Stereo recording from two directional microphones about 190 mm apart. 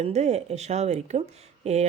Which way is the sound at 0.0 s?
35° right (ahead or behind).